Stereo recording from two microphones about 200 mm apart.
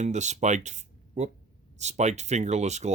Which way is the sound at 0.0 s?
35° right (ahead or behind).